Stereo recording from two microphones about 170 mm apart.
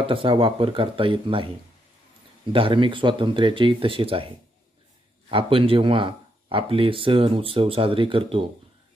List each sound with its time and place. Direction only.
0.0 s speech: 30° right (ahead or behind)
5.3 s speech: 30° right (ahead or behind)